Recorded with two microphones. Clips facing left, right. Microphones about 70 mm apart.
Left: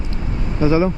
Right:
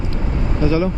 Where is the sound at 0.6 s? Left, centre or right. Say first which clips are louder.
Left 2 dB; left.